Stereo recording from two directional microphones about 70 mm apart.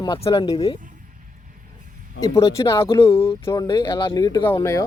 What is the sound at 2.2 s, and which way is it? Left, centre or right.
Speech, left.